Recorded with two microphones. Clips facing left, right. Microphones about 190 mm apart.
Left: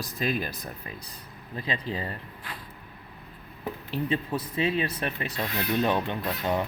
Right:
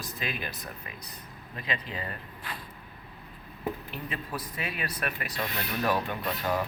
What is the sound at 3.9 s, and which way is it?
Speech, 25° left (ahead or behind).